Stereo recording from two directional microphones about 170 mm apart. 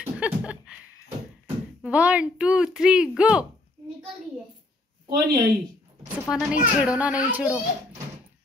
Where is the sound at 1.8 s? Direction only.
10° right (ahead or behind).